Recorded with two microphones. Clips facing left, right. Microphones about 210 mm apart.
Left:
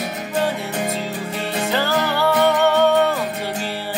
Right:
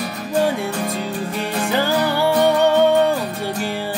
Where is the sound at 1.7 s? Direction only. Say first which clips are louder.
Right 2 dB; 15° right (ahead or behind).